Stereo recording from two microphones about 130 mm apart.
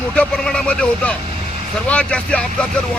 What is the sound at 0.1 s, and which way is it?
Speech, 10° left (ahead or behind).